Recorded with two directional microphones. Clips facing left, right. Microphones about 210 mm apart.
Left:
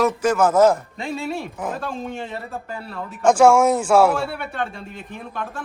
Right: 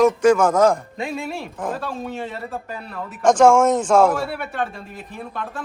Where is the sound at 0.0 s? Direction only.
5° left (ahead or behind).